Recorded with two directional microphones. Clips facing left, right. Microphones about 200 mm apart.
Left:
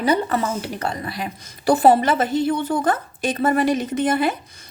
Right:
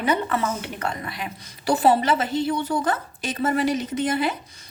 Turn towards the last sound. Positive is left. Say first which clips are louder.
# left 4 dB
turn(degrees=50)  # may be behind; listen again after turning